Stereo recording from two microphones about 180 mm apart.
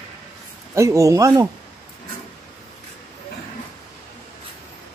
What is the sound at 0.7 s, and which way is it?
Speech, 15° right (ahead or behind).